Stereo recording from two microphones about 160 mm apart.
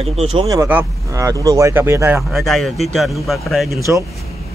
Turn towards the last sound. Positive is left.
turn(degrees=0)  # may be behind; listen again after turning